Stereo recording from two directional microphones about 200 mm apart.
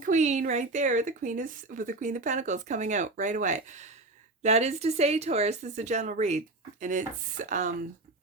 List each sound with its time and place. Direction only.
0.0 s speech: 35° right (ahead or behind)